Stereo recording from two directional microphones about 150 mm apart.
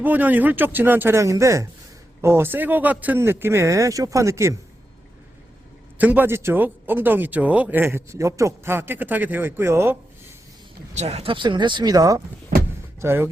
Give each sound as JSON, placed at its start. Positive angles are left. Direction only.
{"t": 0.0, "sound": "speech", "side_deg": -10}
{"t": 6.0, "sound": "speech", "side_deg": -10}
{"t": 10.9, "sound": "speech", "side_deg": -45}